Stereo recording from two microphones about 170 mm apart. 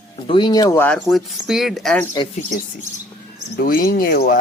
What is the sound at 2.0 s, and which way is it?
Speech, 20° left (ahead or behind).